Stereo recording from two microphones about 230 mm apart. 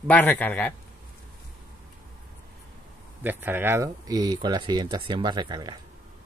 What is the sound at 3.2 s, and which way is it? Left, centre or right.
Speech, centre.